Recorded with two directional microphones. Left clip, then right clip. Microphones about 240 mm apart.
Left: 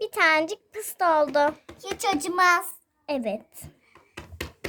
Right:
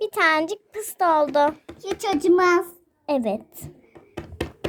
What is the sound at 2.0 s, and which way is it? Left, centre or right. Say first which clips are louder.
Speech: right 4 dB; left.